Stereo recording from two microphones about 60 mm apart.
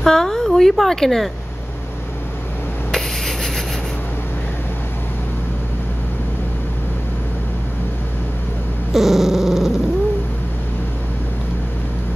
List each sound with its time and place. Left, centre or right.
0.0 s speech: centre
2.9 s writing: centre
8.9 s dog: centre